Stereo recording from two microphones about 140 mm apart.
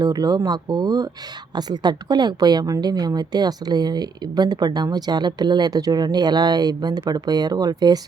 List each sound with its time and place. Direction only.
0.0 s a woman's voice: 25° right (ahead or behind)